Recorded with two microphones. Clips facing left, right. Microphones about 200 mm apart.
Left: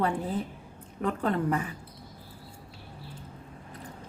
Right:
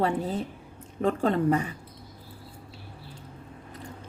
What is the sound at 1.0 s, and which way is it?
Speech, 25° right (ahead or behind).